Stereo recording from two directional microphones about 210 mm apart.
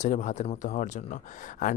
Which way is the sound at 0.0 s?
35° left (ahead or behind).